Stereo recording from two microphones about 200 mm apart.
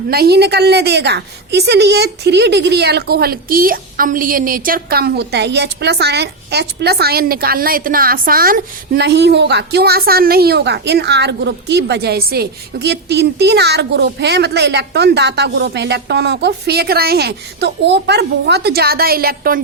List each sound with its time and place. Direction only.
0.1 s a woman's voice: 50° right (ahead or behind)